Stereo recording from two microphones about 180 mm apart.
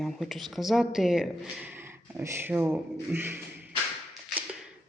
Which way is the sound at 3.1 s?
10° right (ahead or behind).